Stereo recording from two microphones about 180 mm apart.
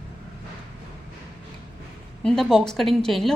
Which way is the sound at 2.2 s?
Centre (ahead or behind).